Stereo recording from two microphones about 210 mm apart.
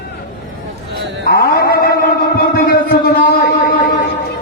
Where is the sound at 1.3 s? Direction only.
50° left (ahead or behind).